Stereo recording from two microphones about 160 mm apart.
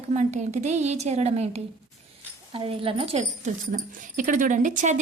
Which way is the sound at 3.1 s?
50° right (ahead or behind).